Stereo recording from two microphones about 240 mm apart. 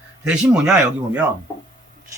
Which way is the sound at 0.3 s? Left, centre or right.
Centre.